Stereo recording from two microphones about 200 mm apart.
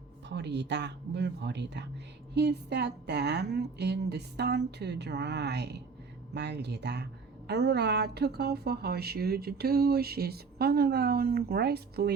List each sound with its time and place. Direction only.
0.3 s a woman's voice: 60° right (ahead or behind)